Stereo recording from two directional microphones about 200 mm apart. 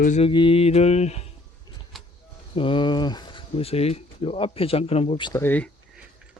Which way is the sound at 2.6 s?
25° left (ahead or behind).